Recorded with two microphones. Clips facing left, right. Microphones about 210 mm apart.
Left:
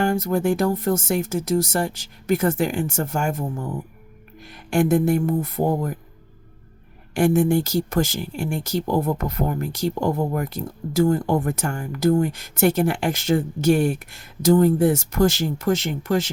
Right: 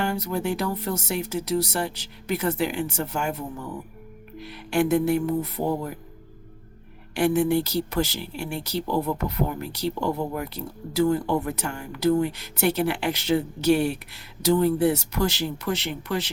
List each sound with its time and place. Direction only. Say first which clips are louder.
0.0 s speech: left 6 dB; 50° left (ahead or behind)
7.1 s speech: left 3 dB; 45° left (ahead or behind)